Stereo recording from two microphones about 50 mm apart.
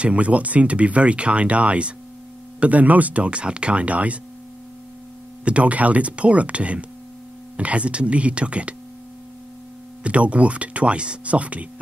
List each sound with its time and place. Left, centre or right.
0.0 s speech: right
5.4 s speech: right
10.0 s speech: right